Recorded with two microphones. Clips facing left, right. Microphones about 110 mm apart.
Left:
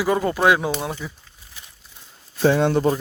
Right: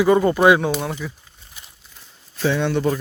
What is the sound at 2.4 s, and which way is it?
Speech, 40° left (ahead or behind).